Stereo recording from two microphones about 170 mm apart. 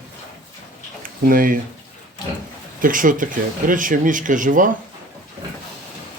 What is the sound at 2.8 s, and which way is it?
Speech, 55° right (ahead or behind).